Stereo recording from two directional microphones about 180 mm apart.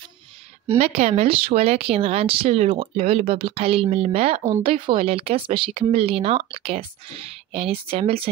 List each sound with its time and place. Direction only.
0.7 s speech: 35° right (ahead or behind)